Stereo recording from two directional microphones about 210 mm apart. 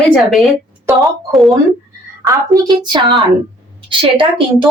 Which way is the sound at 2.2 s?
20° right (ahead or behind).